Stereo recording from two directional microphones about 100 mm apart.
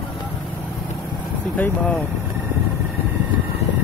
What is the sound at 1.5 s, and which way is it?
Speech, 15° left (ahead or behind).